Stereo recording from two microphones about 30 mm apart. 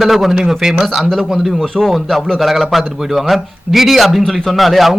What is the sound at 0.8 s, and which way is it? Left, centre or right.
A man's voice, centre.